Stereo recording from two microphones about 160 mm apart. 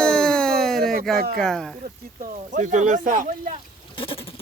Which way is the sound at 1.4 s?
5° left (ahead or behind).